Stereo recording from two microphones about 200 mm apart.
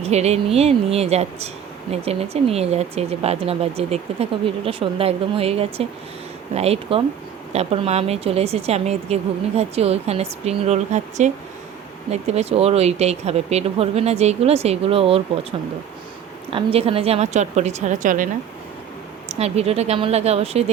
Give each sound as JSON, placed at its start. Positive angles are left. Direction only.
{"t": 0.0, "sound": "speech", "side_deg": -35}
{"t": 16.5, "sound": "speech", "side_deg": -25}
{"t": 19.3, "sound": "speech", "side_deg": -30}